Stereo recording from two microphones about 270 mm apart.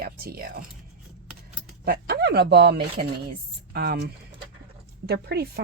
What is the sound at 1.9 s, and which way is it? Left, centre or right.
Speech, right.